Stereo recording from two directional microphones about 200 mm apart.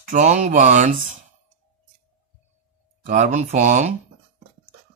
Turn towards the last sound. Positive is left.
turn(degrees=-35)  # may be behind; listen again after turning